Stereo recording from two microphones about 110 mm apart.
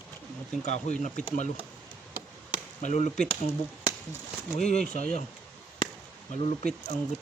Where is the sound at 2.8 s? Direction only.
90° left.